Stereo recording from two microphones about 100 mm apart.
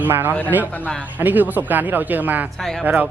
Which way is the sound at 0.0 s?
20° right (ahead or behind).